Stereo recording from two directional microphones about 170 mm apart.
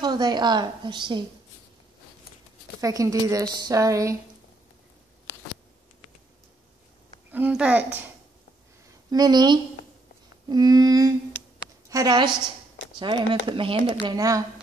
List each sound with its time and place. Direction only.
0.0 s speech: 25° right (ahead or behind)
2.8 s speech: 20° right (ahead or behind)
7.2 s speech: 10° right (ahead or behind)
9.1 s speech: 25° right (ahead or behind)
14.0 s speech: 20° right (ahead or behind)